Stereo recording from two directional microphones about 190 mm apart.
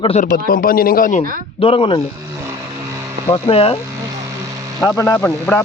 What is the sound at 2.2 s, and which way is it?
Vehicle, 15° right (ahead or behind).